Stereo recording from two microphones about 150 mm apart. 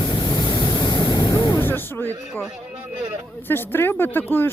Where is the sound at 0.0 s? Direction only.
30° left (ahead or behind).